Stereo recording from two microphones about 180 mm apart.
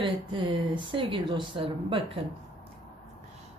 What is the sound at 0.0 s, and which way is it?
Speech, 25° right (ahead or behind).